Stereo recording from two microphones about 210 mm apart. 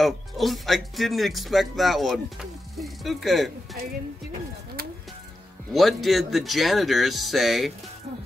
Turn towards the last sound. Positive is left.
turn(degrees=0)  # may be behind; listen again after turning